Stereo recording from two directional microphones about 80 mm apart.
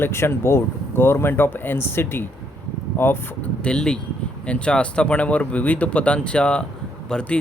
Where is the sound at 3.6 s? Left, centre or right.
Centre.